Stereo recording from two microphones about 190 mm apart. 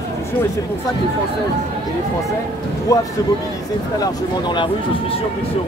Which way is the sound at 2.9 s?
15° left (ahead or behind).